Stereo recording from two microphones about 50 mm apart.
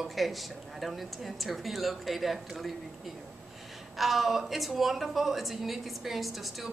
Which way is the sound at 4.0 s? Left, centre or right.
Centre.